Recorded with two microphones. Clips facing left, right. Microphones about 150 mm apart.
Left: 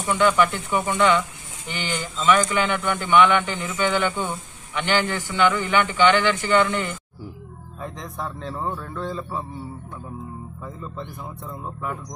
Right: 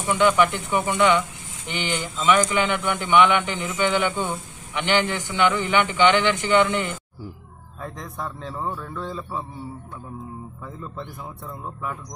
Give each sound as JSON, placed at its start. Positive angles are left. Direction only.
{"t": 0.0, "sound": "speech", "side_deg": -15}
{"t": 7.8, "sound": "a man's voice", "side_deg": 0}
{"t": 10.8, "sound": "a man's voice", "side_deg": -5}